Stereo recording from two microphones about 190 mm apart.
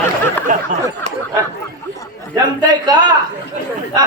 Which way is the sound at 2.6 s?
20° right (ahead or behind).